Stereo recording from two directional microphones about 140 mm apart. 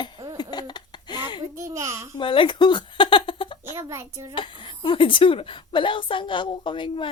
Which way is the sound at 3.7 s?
20° right (ahead or behind).